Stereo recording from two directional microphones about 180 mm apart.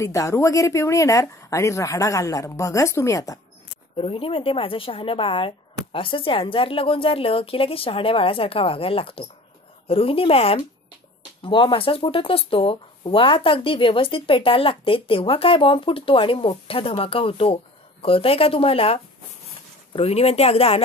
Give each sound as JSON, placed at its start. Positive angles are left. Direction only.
{"t": 0.0, "sound": "speech", "side_deg": 15}
{"t": 3.9, "sound": "speech", "side_deg": 30}